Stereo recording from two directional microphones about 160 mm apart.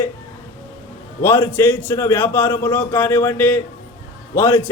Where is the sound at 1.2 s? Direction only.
15° left (ahead or behind).